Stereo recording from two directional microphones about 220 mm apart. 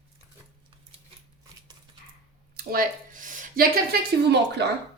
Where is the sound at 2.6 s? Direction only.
40° right (ahead or behind).